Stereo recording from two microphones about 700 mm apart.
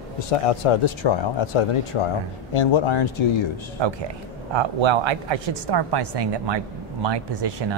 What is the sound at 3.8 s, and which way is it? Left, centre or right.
Speech, right.